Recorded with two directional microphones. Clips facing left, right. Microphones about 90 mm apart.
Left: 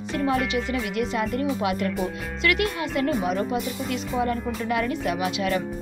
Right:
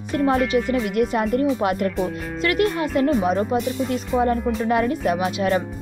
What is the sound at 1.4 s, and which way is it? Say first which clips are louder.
Speech: right 5 dB; 35° right (ahead or behind).